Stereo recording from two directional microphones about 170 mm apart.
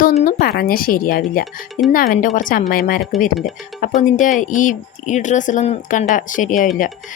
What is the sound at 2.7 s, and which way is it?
Speech, 65° left (ahead or behind).